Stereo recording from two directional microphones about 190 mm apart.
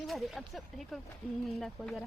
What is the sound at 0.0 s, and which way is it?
Speech, centre (ahead or behind).